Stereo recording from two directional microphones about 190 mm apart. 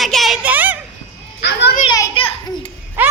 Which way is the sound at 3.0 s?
10° right (ahead or behind).